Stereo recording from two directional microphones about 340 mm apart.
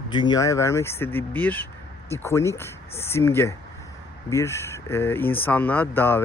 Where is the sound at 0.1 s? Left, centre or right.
Centre.